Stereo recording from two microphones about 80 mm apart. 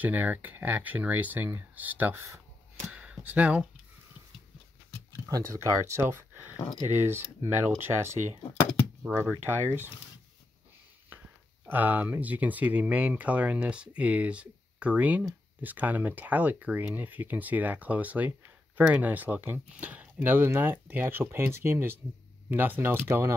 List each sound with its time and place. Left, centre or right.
0.0 s speech: right
5.3 s speech: right
11.6 s speech: right